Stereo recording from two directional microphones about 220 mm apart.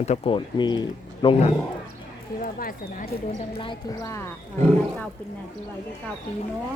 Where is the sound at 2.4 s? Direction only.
40° left (ahead or behind).